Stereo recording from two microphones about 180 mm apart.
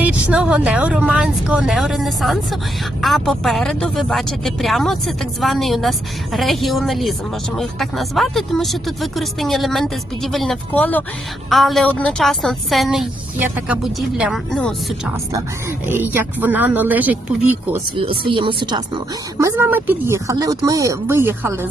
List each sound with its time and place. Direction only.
0.0 s speech: 5° right (ahead or behind)
16.1 s speech: 10° right (ahead or behind)
17.9 s speech: 30° right (ahead or behind)
19.4 s speech: 15° right (ahead or behind)